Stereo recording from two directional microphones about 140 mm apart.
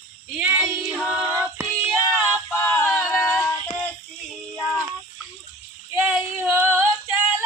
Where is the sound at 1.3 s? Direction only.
20° right (ahead or behind).